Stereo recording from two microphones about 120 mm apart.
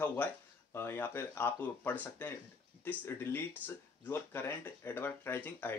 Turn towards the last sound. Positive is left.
turn(degrees=20)  # may be behind; listen again after turning